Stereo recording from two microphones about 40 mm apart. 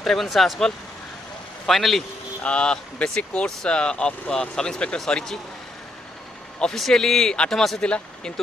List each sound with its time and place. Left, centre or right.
0.0 s speech: centre
1.7 s speech: centre
2.4 s speech: left
6.7 s a man's voice: centre